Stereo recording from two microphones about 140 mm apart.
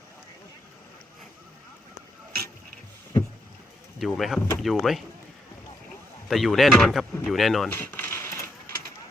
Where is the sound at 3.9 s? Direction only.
Centre (ahead or behind).